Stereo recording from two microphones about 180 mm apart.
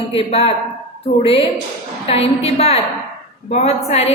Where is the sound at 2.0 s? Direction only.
35° left (ahead or behind).